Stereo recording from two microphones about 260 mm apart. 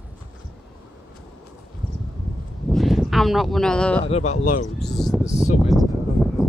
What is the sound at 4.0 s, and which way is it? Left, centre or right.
Speech, left.